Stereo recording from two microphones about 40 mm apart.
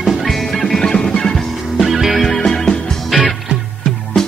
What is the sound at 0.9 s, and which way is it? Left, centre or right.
Music, centre.